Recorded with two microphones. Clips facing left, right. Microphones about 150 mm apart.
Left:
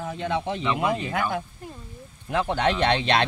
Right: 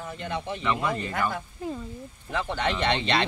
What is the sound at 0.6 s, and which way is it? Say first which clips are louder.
Speech: left 3 dB; 15° left (ahead or behind).